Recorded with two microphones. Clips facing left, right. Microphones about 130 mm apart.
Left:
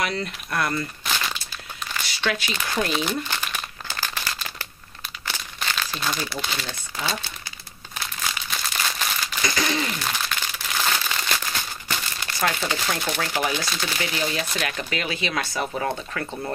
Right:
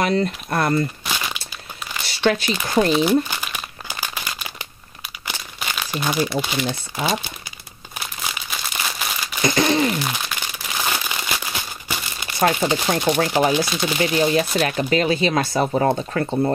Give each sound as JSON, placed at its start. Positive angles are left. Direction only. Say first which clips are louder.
{"t": 0.0, "sound": "speech", "louder": "right 8 dB", "side_deg": -35}
{"t": 1.0, "sound": "crumpling", "louder": "right 1 dB", "side_deg": -10}
{"t": 2.0, "sound": "crumpling", "louder": "right 8 dB", "side_deg": -30}
{"t": 2.6, "sound": "speech", "louder": "right 8 dB", "side_deg": -35}
{"t": 2.9, "sound": "crumpling", "louder": "right 8 dB", "side_deg": -10}
{"t": 6.7, "sound": "speech", "louder": "right 6 dB", "side_deg": -15}
{"t": 8.0, "sound": "crumpling", "louder": "right 1 dB", "side_deg": -15}
{"t": 9.5, "sound": "speech", "louder": "right 8 dB", "side_deg": -30}
{"t": 10.0, "sound": "crumpling", "louder": "right 1 dB", "side_deg": -15}
{"t": 12.4, "sound": "speech", "louder": "right 7 dB", "side_deg": -20}